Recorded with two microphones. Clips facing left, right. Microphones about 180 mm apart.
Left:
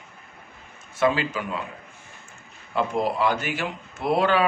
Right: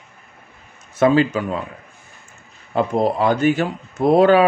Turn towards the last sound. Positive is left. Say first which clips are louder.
# right 9 dB
turn(degrees=-40)  # may be behind; listen again after turning